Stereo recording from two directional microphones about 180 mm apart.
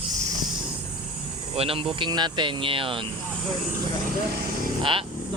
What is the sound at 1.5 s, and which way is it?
Speech, 30° right (ahead or behind).